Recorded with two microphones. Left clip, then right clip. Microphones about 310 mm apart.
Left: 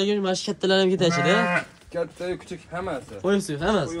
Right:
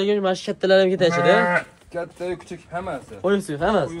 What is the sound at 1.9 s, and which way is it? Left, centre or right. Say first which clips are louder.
Speech: even; right.